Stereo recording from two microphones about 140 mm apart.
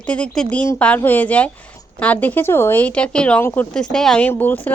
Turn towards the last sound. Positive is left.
turn(degrees=15)  # may be behind; listen again after turning